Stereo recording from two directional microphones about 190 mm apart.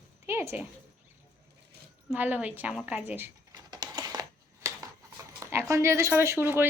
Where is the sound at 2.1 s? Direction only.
10° right (ahead or behind).